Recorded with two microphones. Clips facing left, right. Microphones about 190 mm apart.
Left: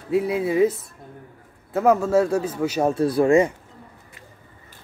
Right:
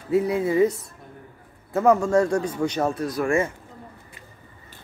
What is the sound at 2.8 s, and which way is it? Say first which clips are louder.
Speech: left 6 dB; 30° left (ahead or behind).